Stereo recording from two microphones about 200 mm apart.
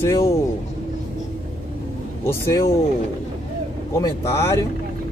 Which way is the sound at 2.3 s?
15° left (ahead or behind).